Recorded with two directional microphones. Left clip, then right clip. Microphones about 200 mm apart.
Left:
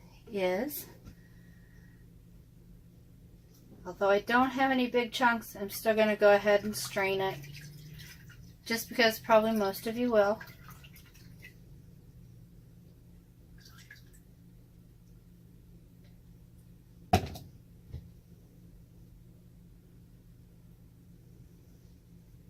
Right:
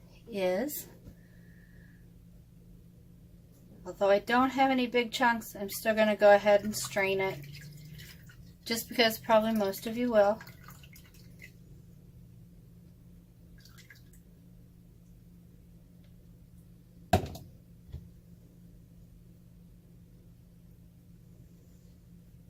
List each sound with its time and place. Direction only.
0.3 s speech: 40° right (ahead or behind)
3.8 s speech: 35° right (ahead or behind)
8.6 s speech: 40° right (ahead or behind)